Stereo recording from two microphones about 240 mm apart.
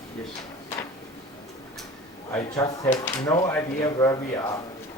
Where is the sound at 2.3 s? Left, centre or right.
Centre.